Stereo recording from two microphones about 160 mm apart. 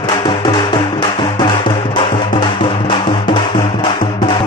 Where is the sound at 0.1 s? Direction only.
30° left (ahead or behind).